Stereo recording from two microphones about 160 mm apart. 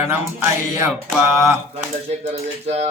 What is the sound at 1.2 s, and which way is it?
Music, 15° right (ahead or behind).